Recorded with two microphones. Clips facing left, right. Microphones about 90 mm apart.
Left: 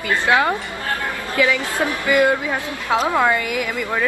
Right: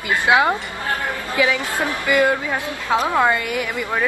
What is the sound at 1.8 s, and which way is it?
Speech, 15° left (ahead or behind).